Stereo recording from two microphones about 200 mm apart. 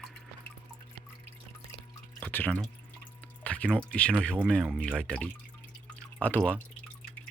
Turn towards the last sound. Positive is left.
turn(degrees=5)  # may be behind; listen again after turning